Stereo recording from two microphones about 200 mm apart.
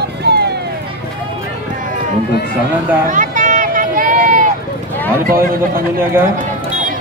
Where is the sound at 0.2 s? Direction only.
55° right (ahead or behind).